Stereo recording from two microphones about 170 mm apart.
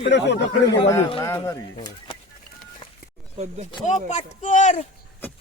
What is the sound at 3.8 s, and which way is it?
Speech, 45° left (ahead or behind).